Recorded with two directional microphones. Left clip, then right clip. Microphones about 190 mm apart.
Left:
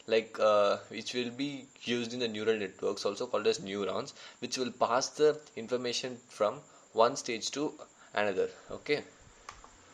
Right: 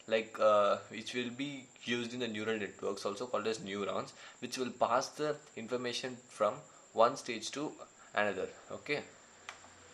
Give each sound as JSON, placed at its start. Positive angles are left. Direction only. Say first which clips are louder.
{"t": 0.0, "sound": "speech", "louder": "left 3 dB", "side_deg": 25}